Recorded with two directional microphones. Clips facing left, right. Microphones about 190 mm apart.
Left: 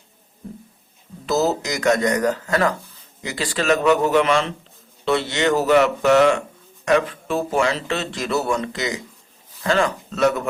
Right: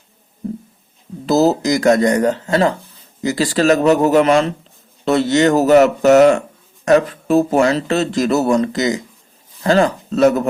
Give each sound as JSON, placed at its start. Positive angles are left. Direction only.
{"t": 1.3, "sound": "speech", "side_deg": -35}
{"t": 3.2, "sound": "speech", "side_deg": -40}